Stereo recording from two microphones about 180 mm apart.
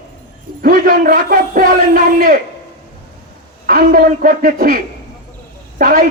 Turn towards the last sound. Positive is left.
turn(degrees=-50)  # may be behind; listen again after turning